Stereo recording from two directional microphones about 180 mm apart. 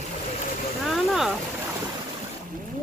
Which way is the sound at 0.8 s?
Centre (ahead or behind).